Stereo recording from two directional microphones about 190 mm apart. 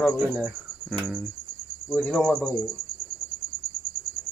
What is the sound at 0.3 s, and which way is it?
Speech, centre (ahead or behind).